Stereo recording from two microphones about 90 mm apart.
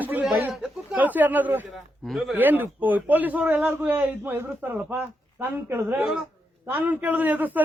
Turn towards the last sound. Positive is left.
turn(degrees=-20)  # may be behind; listen again after turning